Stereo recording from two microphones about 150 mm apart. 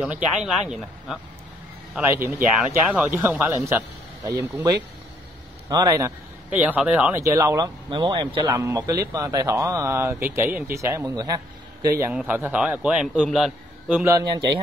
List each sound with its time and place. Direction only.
0.0 s speech: 5° right (ahead or behind)
2.0 s a man's voice: 15° right (ahead or behind)
2.5 s speech: 5° right (ahead or behind)
3.4 s speech: 20° right (ahead or behind)
5.7 s speech: 25° right (ahead or behind)
6.5 s a man's voice: 10° right (ahead or behind)
7.2 s speech: 20° right (ahead or behind)
12.1 s a man's voice: 5° right (ahead or behind)
14.0 s speech: 20° right (ahead or behind)